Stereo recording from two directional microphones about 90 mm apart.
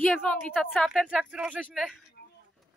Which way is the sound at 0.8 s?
5° left (ahead or behind).